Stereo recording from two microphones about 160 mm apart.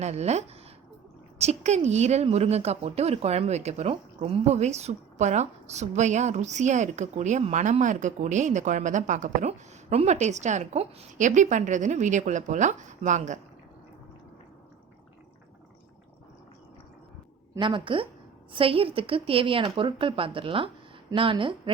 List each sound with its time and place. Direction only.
0.0 s speech: 45° right (ahead or behind)
17.6 s speech: 30° right (ahead or behind)